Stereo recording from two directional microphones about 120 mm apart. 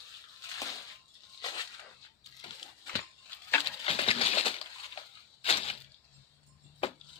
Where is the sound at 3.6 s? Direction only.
50° left (ahead or behind).